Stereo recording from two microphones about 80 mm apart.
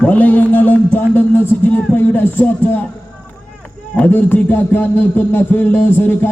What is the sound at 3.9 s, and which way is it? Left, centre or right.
A man's voice, left.